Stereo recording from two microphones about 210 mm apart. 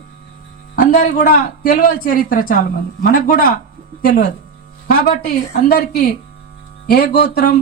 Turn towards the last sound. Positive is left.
turn(degrees=50)  # may be behind; listen again after turning